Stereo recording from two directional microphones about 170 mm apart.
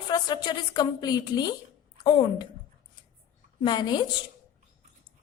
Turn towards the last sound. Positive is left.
turn(degrees=25)  # may be behind; listen again after turning